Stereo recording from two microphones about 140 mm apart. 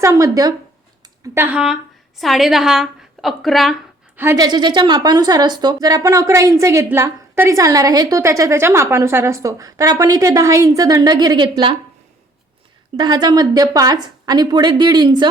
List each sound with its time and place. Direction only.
0.0 s a woman's voice: 25° right (ahead or behind); by 3.8 s centre (ahead or behind)
4.2 s a woman's voice: 20° right (ahead or behind)
4.4 s a woman's voice: 30° right (ahead or behind)
13.0 s a woman's voice: 30° right (ahead or behind)